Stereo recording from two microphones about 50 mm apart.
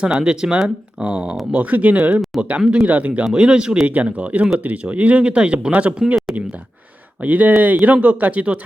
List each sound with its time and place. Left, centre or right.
0.0 s speech: centre
1.5 s speech: right
7.2 s speech: right